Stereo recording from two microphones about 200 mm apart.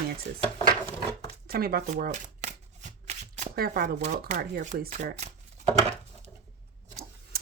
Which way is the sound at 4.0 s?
35° right (ahead or behind).